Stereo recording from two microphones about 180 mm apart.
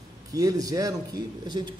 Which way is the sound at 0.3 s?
20° right (ahead or behind).